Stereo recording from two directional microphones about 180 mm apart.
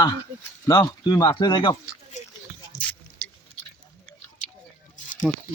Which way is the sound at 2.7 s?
50° left (ahead or behind).